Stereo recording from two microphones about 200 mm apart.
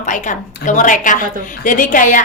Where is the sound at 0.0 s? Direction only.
40° left (ahead or behind).